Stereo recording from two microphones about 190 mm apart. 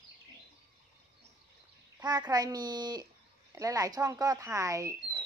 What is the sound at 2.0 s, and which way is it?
A child's voice, 20° right (ahead or behind).